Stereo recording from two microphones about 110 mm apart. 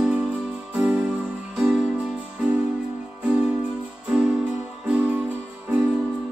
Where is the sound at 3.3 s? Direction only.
10° right (ahead or behind).